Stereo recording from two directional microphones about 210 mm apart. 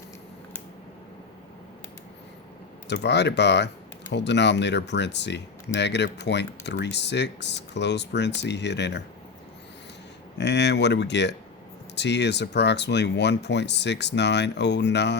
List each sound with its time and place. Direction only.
2.8 s speech: 55° left (ahead or behind)
10.3 s speech: 55° left (ahead or behind)